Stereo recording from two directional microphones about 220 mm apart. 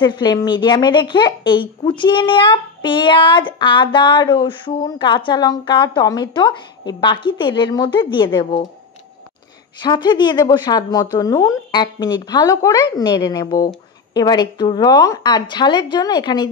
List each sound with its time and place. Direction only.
0.0 s a woman's voice: 20° left (ahead or behind)
9.8 s a woman's voice: 20° left (ahead or behind)